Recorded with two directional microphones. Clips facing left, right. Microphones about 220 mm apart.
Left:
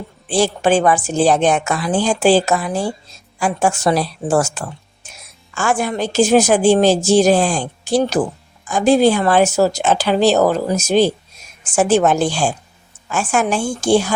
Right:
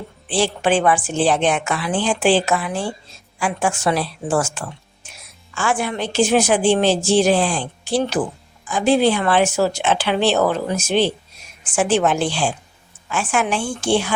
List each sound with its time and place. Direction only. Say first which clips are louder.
0.3 s a woman's voice: left 3 dB; 40° left (ahead or behind)